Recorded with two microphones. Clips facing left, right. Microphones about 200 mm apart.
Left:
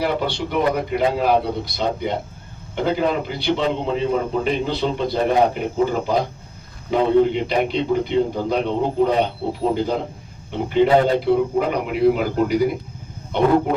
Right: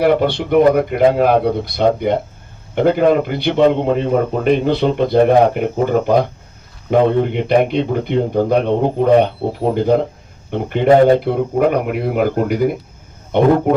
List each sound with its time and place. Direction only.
0.0 s speech: 60° right (ahead or behind)